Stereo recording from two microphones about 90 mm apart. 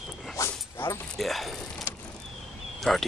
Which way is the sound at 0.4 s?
35° left (ahead or behind).